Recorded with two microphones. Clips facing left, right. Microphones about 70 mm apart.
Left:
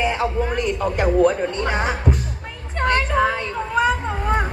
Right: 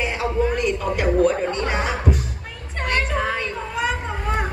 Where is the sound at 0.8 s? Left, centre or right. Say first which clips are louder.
Left 4 dB; left.